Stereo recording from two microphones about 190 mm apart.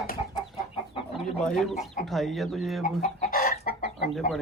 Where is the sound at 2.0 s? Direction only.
Centre (ahead or behind).